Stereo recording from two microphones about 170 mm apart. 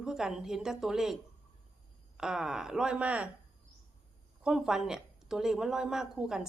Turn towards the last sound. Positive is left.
turn(degrees=-5)  # may be behind; listen again after turning